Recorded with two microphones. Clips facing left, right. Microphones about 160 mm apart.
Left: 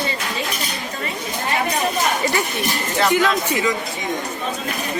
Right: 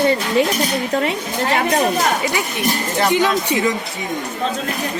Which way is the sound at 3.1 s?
20° right (ahead or behind).